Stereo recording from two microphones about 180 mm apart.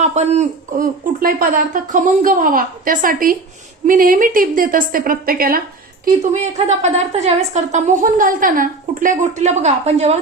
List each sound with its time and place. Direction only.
0.0 s speech: 40° right (ahead or behind)
6.3 s a woman's voice: 40° right (ahead or behind)